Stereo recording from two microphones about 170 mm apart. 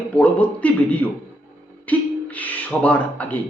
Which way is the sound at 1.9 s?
10° left (ahead or behind).